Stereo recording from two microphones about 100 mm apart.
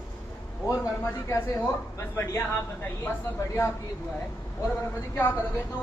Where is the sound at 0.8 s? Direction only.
30° left (ahead or behind).